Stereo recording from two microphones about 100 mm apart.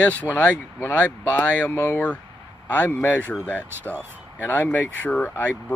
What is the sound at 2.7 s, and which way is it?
Speech, 15° left (ahead or behind).